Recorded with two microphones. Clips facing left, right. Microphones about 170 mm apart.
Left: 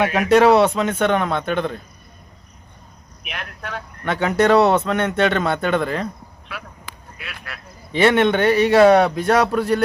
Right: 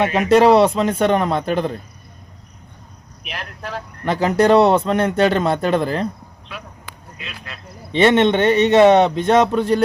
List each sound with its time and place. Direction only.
0.1 s a man's voice: 30° right (ahead or behind)
3.2 s a man's voice: 30° right (ahead or behind)
7.4 s a man's voice: 25° right (ahead or behind)
9.1 s a sound: 25° right (ahead or behind)